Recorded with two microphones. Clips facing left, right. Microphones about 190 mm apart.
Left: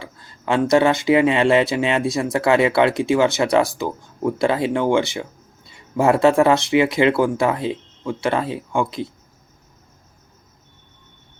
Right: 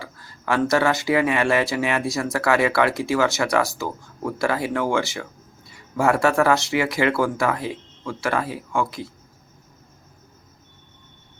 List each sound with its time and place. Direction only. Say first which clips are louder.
0.0 s speech: left 2 dB; 20° left (ahead or behind)